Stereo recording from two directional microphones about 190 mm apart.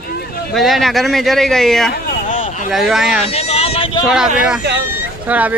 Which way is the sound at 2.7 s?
Centre (ahead or behind).